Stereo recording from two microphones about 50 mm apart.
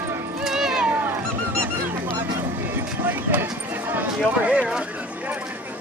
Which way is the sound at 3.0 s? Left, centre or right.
Right.